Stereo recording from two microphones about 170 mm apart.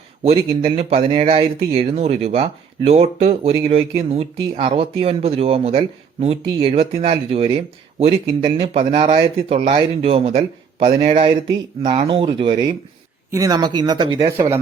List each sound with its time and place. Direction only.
0.3 s speech: 35° right (ahead or behind); by 14.6 s 15° right (ahead or behind)